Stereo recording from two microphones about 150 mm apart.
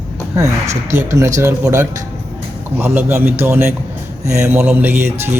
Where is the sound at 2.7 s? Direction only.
15° right (ahead or behind).